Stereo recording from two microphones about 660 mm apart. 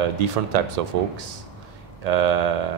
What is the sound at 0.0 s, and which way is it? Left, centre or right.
Speech, right.